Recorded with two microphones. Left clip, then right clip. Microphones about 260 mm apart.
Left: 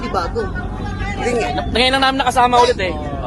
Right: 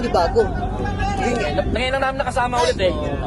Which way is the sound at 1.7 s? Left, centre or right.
Left.